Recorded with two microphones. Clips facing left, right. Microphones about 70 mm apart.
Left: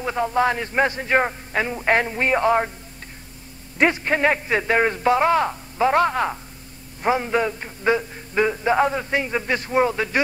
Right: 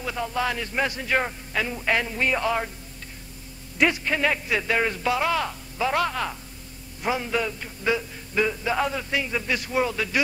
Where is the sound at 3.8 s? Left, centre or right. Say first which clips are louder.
Left 4 dB; left.